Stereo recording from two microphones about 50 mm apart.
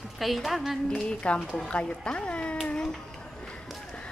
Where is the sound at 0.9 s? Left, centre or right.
Left.